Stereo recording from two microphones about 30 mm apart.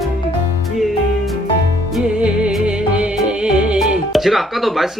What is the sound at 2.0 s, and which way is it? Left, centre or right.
Music, right.